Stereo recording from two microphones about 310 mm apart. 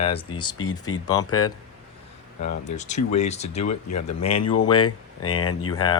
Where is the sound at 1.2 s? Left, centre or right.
Centre.